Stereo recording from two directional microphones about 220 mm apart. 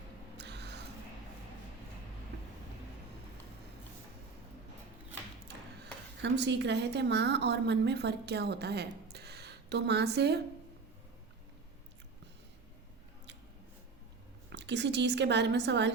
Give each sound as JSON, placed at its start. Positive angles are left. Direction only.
{"t": 0.3, "sound": "a sound", "side_deg": -50}
{"t": 6.2, "sound": "a woman's voice", "side_deg": -50}
{"t": 14.5, "sound": "a woman's voice", "side_deg": -50}